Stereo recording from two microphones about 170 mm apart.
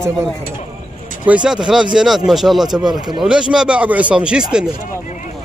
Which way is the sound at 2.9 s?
25° right (ahead or behind).